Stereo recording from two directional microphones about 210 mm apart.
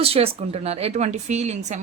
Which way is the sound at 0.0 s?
25° right (ahead or behind).